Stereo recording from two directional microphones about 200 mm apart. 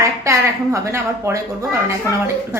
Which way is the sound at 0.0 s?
15° right (ahead or behind).